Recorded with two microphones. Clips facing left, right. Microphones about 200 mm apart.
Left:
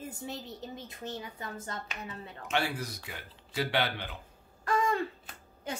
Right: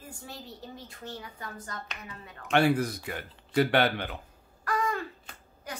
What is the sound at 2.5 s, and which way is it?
Speech, 55° right (ahead or behind).